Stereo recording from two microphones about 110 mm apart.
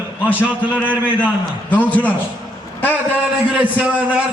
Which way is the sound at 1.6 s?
15° left (ahead or behind).